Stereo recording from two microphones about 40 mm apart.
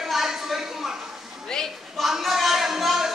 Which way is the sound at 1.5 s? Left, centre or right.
Centre.